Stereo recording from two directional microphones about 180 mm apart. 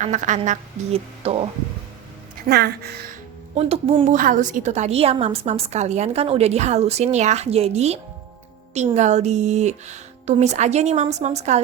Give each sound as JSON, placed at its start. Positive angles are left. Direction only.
{"t": 0.0, "sound": "a woman's voice", "side_deg": -45}
{"t": 1.2, "sound": "a woman's voice", "side_deg": -30}
{"t": 2.5, "sound": "a woman's voice", "side_deg": -65}
{"t": 3.5, "sound": "a woman's voice", "side_deg": -35}
{"t": 4.2, "sound": "a woman's voice", "side_deg": -50}